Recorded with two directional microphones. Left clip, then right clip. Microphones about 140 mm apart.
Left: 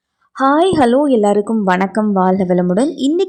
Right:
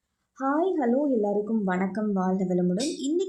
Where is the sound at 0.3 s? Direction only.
45° left (ahead or behind).